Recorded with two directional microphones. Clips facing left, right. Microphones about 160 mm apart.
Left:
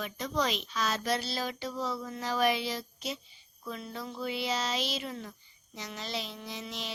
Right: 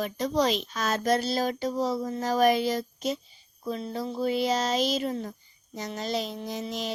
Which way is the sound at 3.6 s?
35° right (ahead or behind).